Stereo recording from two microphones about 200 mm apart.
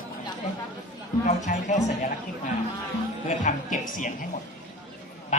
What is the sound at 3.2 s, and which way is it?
Speech, 40° left (ahead or behind).